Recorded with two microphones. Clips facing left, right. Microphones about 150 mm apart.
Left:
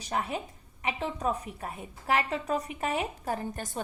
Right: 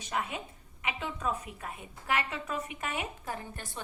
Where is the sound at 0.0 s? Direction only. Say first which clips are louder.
Left 3 dB; 35° left (ahead or behind).